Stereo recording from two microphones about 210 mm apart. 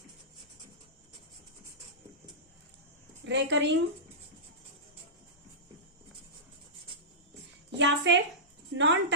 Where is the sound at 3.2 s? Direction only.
60° right (ahead or behind).